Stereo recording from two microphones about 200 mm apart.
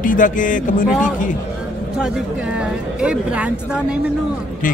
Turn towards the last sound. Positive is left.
turn(degrees=-5)  # may be behind; listen again after turning